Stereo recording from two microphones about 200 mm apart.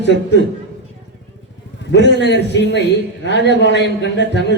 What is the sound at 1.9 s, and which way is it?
A man's voice, 60° left (ahead or behind).